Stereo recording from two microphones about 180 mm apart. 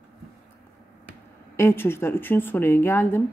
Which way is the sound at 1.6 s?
15° left (ahead or behind).